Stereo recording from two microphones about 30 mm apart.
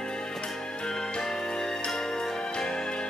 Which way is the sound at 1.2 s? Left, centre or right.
Centre.